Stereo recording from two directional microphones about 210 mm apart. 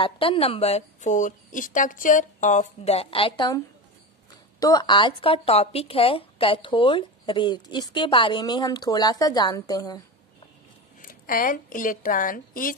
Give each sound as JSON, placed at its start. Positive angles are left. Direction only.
{"t": 0.0, "sound": "speech", "side_deg": 25}
{"t": 11.0, "sound": "a woman's voice", "side_deg": 40}